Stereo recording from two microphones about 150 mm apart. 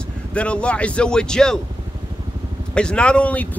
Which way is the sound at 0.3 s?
10° left (ahead or behind).